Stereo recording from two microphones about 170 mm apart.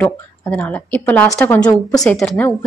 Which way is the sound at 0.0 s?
10° left (ahead or behind).